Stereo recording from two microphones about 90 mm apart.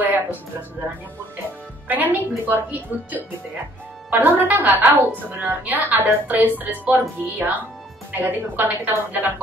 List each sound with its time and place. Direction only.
0.0 s music: 20° right (ahead or behind)
1.9 s a woman's voice: 20° right (ahead or behind)